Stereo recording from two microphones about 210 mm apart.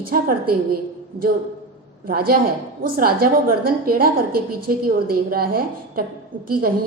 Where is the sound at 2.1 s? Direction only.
45° right (ahead or behind).